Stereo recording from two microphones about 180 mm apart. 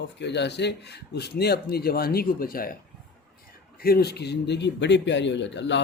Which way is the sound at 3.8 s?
60° left (ahead or behind).